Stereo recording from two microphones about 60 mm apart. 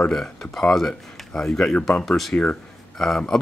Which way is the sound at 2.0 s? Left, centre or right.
Centre.